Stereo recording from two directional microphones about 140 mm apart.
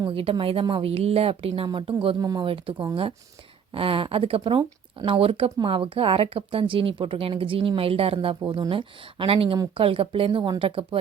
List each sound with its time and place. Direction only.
0.0 s speech: 40° right (ahead or behind)
2.2 s speech: 30° right (ahead or behind)
2.5 s speech: 40° right (ahead or behind)